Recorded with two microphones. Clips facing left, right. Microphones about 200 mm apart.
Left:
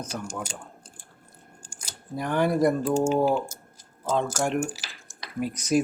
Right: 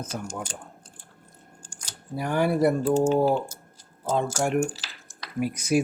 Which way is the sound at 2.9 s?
10° left (ahead or behind).